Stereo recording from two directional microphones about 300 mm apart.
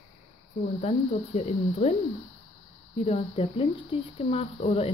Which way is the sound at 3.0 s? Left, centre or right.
Centre.